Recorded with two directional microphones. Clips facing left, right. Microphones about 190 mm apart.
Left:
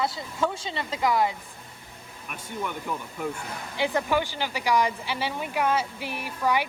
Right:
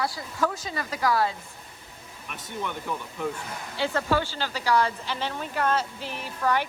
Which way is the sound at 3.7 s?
15° left (ahead or behind).